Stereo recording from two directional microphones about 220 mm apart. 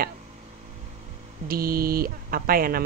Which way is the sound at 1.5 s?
40° right (ahead or behind).